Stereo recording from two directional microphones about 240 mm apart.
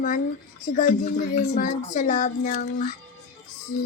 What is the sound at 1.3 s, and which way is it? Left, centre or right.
A child's voice, left.